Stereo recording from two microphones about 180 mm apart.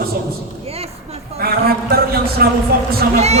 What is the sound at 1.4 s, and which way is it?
Speech, 60° right (ahead or behind).